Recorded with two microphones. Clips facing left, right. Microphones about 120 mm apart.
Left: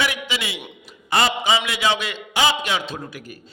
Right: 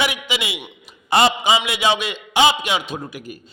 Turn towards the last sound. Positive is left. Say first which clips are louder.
# right 3 dB
turn(degrees=-15)  # may be behind; listen again after turning